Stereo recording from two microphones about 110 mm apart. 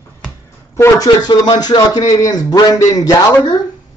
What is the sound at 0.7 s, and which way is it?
Speech, 25° left (ahead or behind).